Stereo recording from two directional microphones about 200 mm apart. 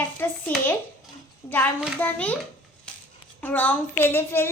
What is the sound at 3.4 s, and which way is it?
A child's voice, 5° left (ahead or behind).